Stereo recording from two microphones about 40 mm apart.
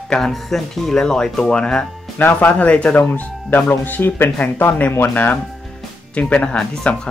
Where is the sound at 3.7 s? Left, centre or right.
Left.